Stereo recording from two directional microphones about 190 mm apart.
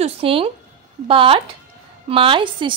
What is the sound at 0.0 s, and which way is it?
A woman's voice, 30° right (ahead or behind).